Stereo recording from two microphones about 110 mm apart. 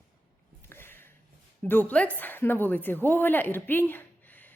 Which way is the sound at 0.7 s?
20° left (ahead or behind).